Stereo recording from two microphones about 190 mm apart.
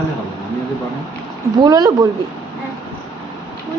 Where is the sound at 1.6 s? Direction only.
20° right (ahead or behind).